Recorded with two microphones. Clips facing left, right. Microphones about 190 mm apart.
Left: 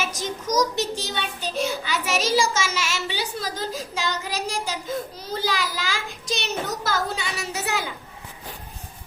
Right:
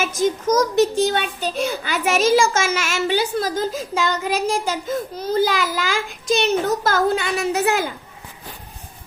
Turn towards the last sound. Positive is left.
turn(degrees=-50)  # may be behind; listen again after turning